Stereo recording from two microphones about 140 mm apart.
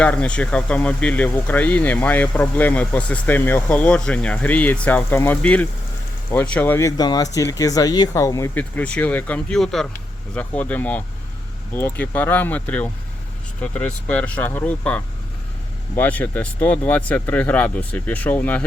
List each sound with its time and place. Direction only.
0.0 s speech: 10° left (ahead or behind)
8.5 s speech: 10° left (ahead or behind)